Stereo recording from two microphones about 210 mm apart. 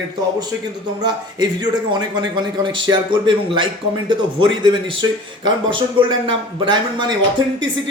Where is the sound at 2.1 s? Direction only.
20° right (ahead or behind).